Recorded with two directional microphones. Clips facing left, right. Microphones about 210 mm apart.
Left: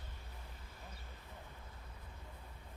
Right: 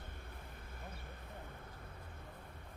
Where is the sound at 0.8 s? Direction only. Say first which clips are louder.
Right 5 dB; 55° right (ahead or behind).